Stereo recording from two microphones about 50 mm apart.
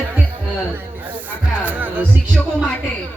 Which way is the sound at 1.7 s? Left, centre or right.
Right.